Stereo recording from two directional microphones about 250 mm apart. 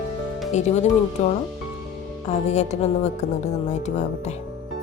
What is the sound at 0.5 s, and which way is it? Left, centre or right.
Speech, left.